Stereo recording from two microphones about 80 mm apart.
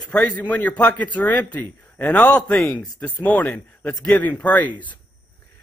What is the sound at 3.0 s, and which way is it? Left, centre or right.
A man's voice, centre.